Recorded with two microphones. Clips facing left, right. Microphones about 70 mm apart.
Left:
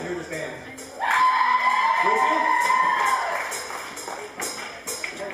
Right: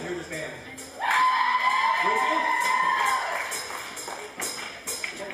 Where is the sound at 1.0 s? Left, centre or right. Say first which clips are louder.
Left 3 dB; centre.